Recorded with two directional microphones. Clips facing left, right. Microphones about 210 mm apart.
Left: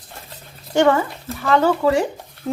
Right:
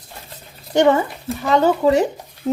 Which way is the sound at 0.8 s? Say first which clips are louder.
Right 1 dB; 20° right (ahead or behind).